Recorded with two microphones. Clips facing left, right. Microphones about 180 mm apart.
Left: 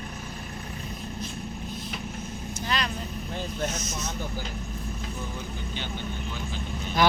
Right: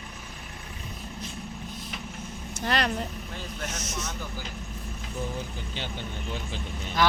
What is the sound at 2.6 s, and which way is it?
Vehicle, 65° right (ahead or behind).